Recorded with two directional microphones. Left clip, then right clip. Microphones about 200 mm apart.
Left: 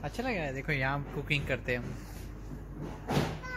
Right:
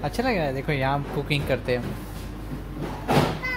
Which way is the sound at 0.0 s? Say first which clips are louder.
Right 10 dB; 10° right (ahead or behind).